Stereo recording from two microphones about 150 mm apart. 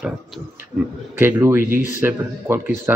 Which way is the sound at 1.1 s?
15° right (ahead or behind).